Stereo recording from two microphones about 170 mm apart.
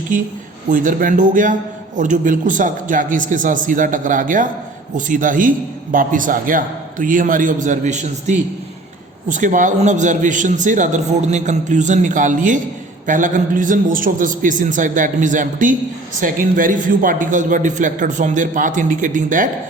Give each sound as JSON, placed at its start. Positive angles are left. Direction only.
{"t": 0.7, "sound": "a man's voice", "side_deg": -50}